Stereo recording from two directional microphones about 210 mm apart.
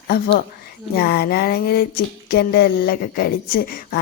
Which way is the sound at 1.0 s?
45° left (ahead or behind).